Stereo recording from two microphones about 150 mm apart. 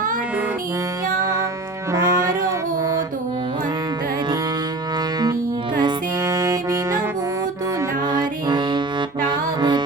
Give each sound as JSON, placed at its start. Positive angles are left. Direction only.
{"t": 1.2, "sound": "music", "side_deg": -20}
{"t": 5.8, "sound": "music", "side_deg": -25}
{"t": 8.2, "sound": "music", "side_deg": -30}